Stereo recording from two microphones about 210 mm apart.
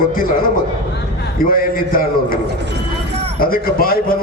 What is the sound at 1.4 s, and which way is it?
A man's voice, 45° left (ahead or behind).